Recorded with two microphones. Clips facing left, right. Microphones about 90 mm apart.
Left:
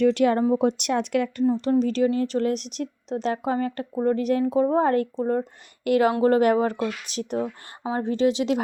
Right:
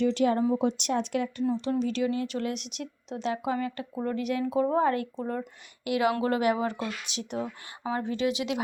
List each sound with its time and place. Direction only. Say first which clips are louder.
0.0 s speech: left 5 dB; 65° left (ahead or behind)
1.8 s speech: left 6 dB; 40° left (ahead or behind)
5.8 s speech: left 7 dB; 45° left (ahead or behind)